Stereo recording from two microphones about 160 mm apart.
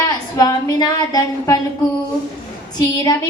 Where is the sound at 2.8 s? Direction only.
25° left (ahead or behind).